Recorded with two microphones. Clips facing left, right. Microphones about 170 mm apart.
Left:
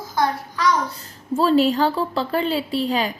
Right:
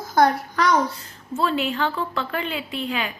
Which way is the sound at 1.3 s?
35° left (ahead or behind).